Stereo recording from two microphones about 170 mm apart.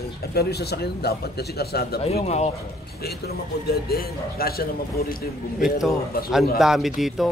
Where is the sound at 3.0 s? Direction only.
65° left (ahead or behind).